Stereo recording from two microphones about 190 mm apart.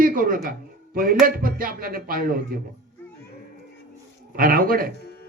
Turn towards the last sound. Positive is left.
turn(degrees=-50)  # may be behind; listen again after turning